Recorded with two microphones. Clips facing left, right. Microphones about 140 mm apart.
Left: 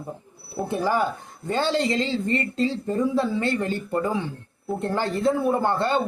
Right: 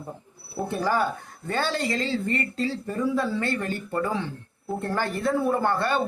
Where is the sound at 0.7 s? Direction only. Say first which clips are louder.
Left 2 dB; 15° left (ahead or behind).